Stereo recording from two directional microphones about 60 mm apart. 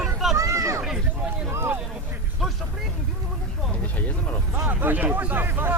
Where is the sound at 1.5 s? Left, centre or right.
Right.